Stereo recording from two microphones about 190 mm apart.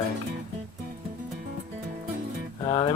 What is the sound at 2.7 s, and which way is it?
Speech, 25° left (ahead or behind).